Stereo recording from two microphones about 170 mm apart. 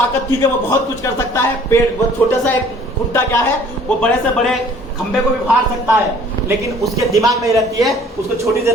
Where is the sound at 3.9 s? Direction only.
5° left (ahead or behind).